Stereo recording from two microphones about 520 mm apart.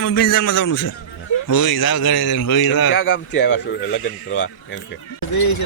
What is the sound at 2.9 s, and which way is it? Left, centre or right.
Speech, left.